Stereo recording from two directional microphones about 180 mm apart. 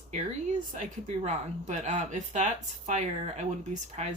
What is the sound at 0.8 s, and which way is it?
Speech, 40° right (ahead or behind).